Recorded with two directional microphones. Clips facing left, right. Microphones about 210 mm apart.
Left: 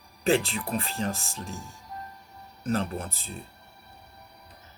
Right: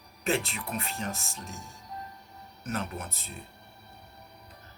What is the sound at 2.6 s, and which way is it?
Speech, 30° left (ahead or behind).